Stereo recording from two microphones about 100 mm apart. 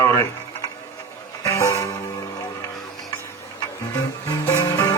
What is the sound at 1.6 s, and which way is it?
Music, 30° left (ahead or behind).